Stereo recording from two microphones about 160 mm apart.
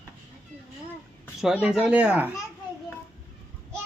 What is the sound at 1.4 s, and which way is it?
Speech, 5° right (ahead or behind).